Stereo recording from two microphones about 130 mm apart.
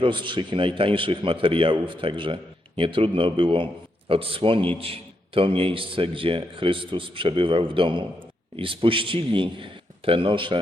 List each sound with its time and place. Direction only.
0.0 s a man's voice: 40° right (ahead or behind)